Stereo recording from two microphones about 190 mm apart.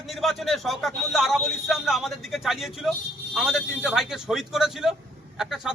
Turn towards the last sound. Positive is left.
turn(degrees=0)  # may be behind; listen again after turning